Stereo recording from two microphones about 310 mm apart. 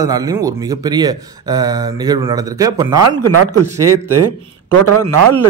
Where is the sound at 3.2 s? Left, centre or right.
Right.